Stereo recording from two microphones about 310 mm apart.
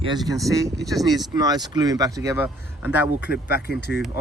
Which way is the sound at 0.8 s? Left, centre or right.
Centre.